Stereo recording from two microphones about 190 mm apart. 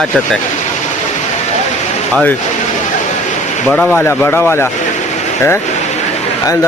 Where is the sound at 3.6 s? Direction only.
5° left (ahead or behind).